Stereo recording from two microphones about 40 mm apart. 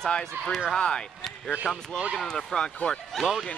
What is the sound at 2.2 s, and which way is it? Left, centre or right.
Speech, centre.